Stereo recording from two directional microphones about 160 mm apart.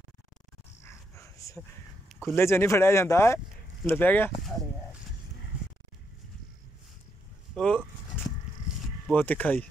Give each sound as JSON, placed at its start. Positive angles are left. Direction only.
{"t": 0.8, "sound": "dog", "side_deg": 15}
{"t": 2.0, "sound": "a sound", "side_deg": 0}
{"t": 2.3, "sound": "speech", "side_deg": 15}
{"t": 7.5, "sound": "vehicle", "side_deg": 5}
{"t": 9.1, "sound": "speech", "side_deg": 10}